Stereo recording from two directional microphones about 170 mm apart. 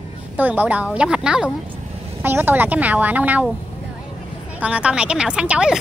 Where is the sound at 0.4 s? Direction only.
10° right (ahead or behind).